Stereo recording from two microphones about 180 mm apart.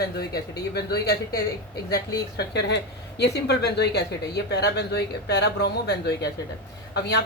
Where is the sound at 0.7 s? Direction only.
60° left (ahead or behind).